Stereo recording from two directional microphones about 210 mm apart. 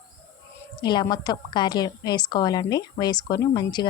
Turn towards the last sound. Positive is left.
turn(degrees=20)  # may be behind; listen again after turning